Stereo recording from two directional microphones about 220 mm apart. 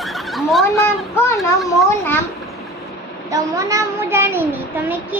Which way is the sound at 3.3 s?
15° right (ahead or behind).